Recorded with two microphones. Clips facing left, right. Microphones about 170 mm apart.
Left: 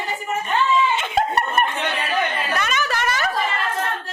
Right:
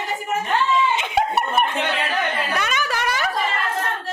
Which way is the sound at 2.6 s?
10° right (ahead or behind).